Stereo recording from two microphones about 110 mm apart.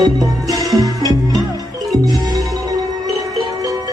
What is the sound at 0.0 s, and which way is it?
Music, 35° right (ahead or behind).